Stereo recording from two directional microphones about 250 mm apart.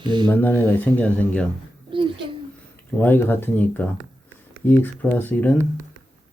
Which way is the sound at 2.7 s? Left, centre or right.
Centre.